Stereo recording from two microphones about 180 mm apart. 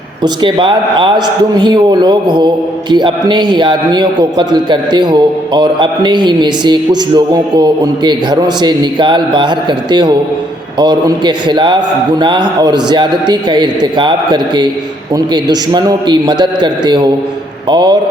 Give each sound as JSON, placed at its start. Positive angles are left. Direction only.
{"t": 0.2, "sound": "a man's voice", "side_deg": -25}